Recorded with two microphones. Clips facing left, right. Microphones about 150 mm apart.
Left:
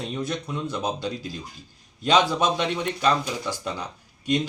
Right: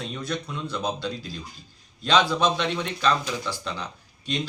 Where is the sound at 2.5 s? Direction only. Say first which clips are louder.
Left 2 dB; 15° left (ahead or behind).